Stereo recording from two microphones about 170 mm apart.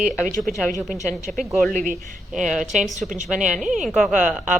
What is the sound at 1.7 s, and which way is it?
A woman's voice, 50° right (ahead or behind).